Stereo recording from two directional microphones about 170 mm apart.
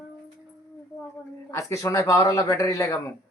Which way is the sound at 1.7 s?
20° left (ahead or behind).